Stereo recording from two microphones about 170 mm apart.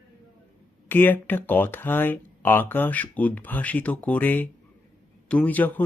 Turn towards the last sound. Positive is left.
turn(degrees=10)  # may be behind; listen again after turning